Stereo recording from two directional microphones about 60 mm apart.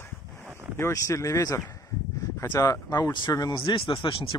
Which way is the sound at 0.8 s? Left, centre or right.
Left.